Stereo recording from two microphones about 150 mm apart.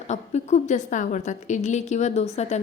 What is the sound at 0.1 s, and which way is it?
A woman's voice, 50° left (ahead or behind).